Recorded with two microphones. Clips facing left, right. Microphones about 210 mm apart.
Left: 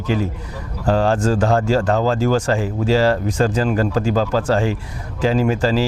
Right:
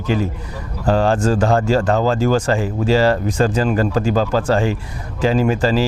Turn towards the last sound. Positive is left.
turn(degrees=-25)  # may be behind; listen again after turning